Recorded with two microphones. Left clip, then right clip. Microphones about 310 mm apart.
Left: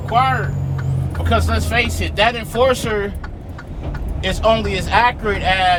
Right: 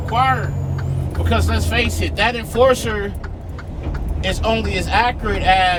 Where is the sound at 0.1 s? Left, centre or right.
Left.